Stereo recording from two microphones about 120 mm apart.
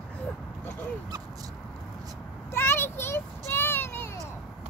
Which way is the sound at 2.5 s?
20° left (ahead or behind).